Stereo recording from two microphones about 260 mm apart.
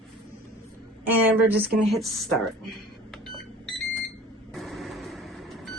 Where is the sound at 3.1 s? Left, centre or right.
Centre.